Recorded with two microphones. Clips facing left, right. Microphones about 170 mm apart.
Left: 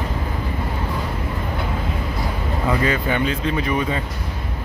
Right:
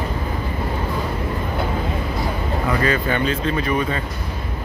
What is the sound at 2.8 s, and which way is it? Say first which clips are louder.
Speech: right 1 dB; 15° left (ahead or behind).